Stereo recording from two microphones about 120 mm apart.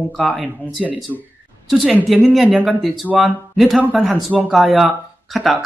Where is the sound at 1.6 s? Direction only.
Centre (ahead or behind).